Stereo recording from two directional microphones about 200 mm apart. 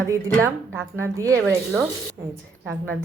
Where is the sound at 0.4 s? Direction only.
15° right (ahead or behind).